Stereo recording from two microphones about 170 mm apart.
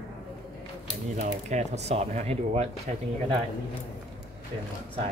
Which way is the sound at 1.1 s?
45° right (ahead or behind).